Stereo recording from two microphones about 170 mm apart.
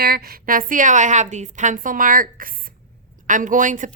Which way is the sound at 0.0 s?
65° right (ahead or behind).